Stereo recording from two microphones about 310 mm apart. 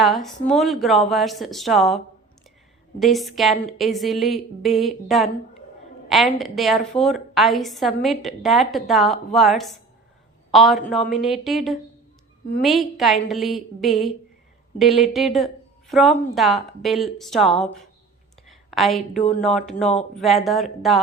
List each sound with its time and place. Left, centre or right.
0.0 s a woman's voice: centre
3.0 s a woman's voice: centre
18.4 s a sound: centre
19.4 s a woman's voice: centre